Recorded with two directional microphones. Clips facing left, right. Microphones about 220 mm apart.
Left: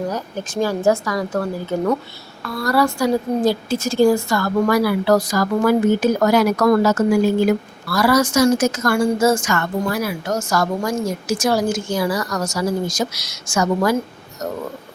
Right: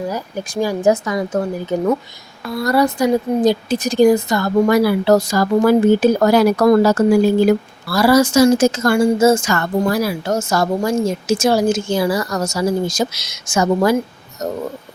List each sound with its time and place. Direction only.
0.1 s a woman's voice: 10° right (ahead or behind); by 10.3 s 35° right (ahead or behind)
10.3 s a woman's voice: 25° right (ahead or behind)